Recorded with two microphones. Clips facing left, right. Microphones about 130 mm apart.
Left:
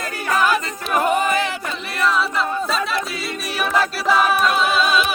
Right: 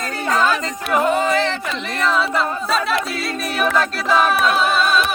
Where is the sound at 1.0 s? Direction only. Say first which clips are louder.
Right 1 dB; 15° left (ahead or behind).